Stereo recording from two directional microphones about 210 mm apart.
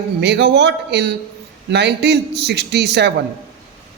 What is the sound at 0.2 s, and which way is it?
A man's voice, 55° right (ahead or behind).